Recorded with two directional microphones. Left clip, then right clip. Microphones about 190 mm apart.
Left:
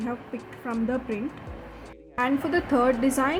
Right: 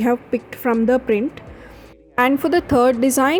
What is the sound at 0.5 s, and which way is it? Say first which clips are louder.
Speech: right 12 dB; 50° right (ahead or behind).